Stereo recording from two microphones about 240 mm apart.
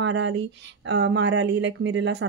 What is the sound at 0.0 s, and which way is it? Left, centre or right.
Speech, right.